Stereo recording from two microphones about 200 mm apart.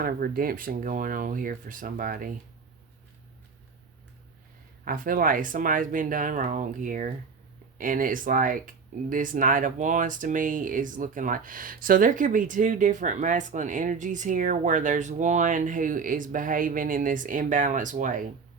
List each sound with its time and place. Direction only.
0.0 s speech: 45° right (ahead or behind)
4.9 s speech: 45° right (ahead or behind)